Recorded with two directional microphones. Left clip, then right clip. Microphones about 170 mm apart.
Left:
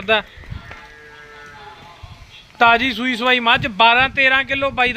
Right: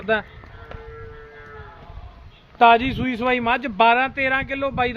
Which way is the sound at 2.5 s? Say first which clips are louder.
Left 1 dB; 10° left (ahead or behind).